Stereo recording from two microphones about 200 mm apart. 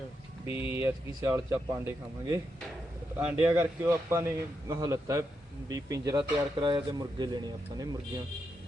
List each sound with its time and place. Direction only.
0.4 s speech: 25° left (ahead or behind)
0.9 s speech: 15° right (ahead or behind)
3.2 s speech: 10° right (ahead or behind)